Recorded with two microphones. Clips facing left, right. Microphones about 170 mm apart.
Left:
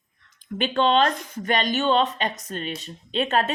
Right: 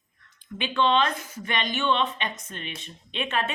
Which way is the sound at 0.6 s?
40° left (ahead or behind).